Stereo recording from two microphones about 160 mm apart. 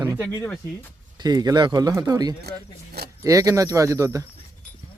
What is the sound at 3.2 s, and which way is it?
Speech, 20° right (ahead or behind).